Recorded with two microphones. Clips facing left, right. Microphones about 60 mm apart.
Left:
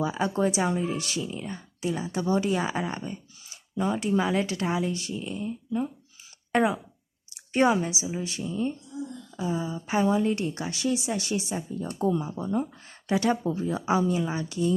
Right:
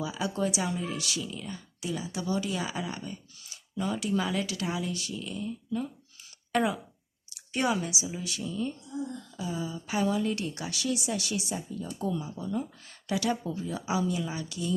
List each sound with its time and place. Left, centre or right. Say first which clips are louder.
0.0 s speech: left 5 dB; left